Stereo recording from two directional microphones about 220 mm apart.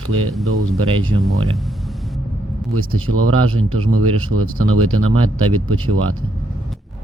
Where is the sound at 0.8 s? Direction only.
25° right (ahead or behind).